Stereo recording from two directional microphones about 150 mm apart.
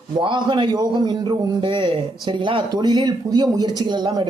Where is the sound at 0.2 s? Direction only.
30° right (ahead or behind).